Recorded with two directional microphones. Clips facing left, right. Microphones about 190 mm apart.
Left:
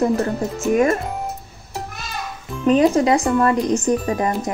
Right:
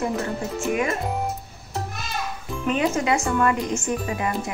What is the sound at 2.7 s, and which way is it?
Speech, 35° left (ahead or behind).